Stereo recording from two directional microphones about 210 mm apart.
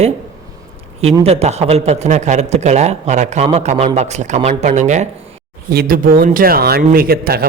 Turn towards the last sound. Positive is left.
turn(degrees=-45)  # may be behind; listen again after turning